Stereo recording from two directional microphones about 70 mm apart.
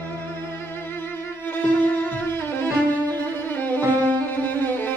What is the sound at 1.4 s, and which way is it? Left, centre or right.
Music, left.